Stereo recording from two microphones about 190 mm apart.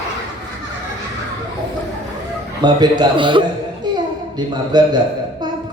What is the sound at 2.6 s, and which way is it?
Speech, 20° right (ahead or behind).